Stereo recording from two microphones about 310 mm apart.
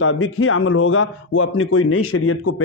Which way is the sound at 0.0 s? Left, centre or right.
Left.